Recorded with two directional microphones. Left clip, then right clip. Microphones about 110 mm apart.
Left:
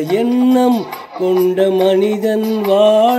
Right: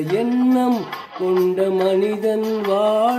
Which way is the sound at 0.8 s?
45° left (ahead or behind).